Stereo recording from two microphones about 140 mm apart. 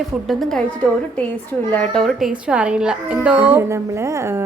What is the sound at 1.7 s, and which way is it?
A woman's voice, 5° left (ahead or behind).